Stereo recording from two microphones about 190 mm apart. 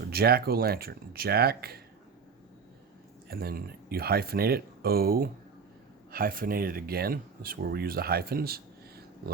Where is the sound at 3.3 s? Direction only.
55° right (ahead or behind).